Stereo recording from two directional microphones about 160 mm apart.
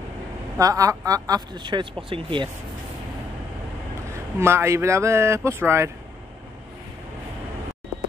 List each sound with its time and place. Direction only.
0.6 s speech: 20° right (ahead or behind)
4.1 s speech: 15° right (ahead or behind)